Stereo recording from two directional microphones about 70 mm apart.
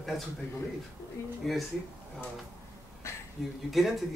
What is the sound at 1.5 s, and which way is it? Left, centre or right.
Speech, centre.